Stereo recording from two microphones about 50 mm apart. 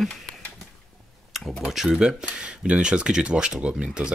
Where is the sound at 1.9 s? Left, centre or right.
Centre.